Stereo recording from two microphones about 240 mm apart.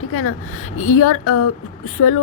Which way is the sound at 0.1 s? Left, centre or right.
Left.